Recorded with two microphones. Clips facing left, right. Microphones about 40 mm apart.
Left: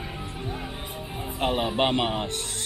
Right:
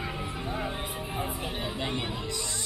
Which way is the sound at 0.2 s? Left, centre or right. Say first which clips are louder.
Right 1 dB; right.